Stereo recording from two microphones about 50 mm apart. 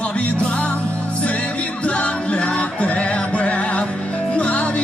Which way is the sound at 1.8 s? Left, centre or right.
Left.